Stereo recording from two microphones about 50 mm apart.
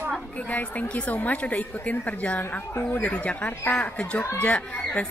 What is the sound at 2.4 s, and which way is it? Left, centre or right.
Speech, left.